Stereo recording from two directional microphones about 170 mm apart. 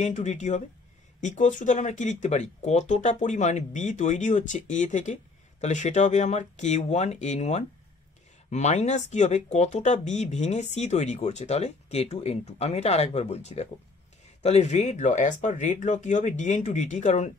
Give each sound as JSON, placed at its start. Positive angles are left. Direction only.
{"t": 0.0, "sound": "speech", "side_deg": 45}